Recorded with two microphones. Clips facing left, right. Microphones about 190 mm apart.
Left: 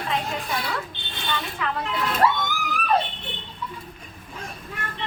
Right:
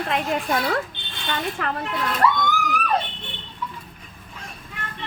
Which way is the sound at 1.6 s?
50° right (ahead or behind).